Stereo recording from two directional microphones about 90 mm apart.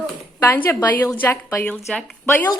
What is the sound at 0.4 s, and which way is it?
Speech, 20° left (ahead or behind).